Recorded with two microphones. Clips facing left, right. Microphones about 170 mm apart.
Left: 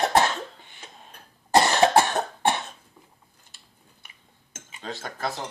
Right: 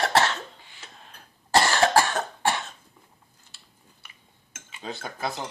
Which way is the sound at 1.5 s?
20° left (ahead or behind).